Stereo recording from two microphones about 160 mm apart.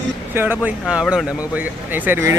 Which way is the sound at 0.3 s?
10° right (ahead or behind).